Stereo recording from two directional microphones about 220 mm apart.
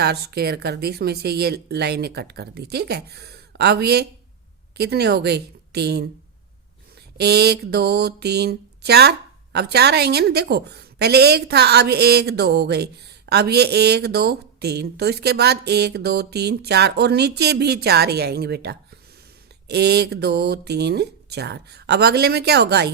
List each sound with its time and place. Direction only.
0.0 s speech: 45° right (ahead or behind)
7.2 s speech: 45° right (ahead or behind)